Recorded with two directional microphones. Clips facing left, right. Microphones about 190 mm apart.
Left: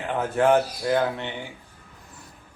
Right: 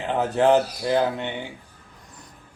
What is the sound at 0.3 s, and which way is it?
Speech, 20° right (ahead or behind).